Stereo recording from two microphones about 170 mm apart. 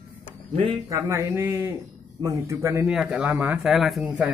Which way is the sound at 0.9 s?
20° right (ahead or behind).